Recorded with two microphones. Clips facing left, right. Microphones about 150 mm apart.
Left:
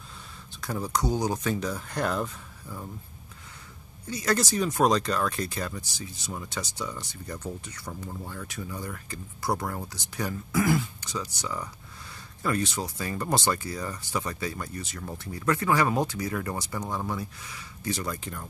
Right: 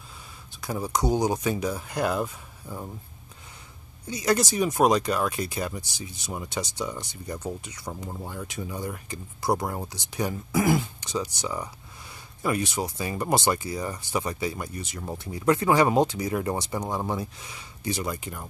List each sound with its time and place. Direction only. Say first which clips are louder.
0.6 s speech: right 2 dB; 10° right (ahead or behind)
2.6 s speech: right 3 dB; 20° right (ahead or behind)
4.1 s speech: right 2 dB; 15° right (ahead or behind)